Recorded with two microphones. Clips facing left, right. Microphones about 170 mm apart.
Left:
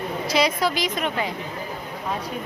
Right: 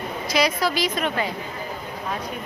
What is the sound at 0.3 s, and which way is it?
Speech, 20° left (ahead or behind).